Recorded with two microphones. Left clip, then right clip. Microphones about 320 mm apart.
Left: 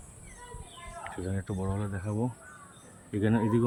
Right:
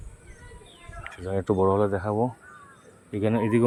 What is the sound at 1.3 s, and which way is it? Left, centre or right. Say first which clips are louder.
Speech: right 15 dB; right.